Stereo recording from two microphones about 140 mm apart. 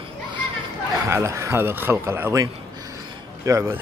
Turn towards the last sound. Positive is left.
turn(degrees=-20)  # may be behind; listen again after turning